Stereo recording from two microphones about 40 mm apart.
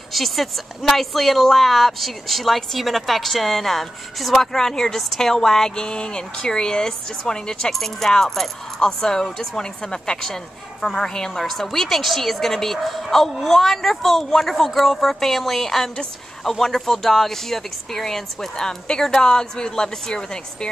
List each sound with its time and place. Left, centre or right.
0.1 s speech: centre